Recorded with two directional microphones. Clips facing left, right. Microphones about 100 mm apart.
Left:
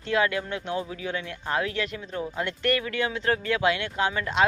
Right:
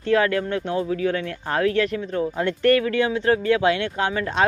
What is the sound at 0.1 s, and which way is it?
Speech, 40° right (ahead or behind).